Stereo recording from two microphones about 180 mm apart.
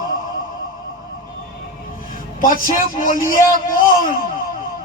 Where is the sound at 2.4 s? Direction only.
50° left (ahead or behind).